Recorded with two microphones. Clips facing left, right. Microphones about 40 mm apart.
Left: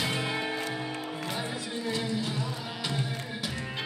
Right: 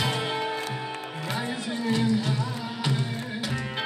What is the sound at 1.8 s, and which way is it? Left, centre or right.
Music, right.